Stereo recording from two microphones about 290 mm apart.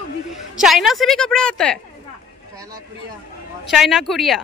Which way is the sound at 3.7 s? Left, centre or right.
Centre.